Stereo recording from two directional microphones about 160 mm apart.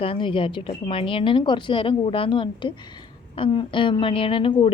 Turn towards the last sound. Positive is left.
turn(degrees=35)  # may be behind; listen again after turning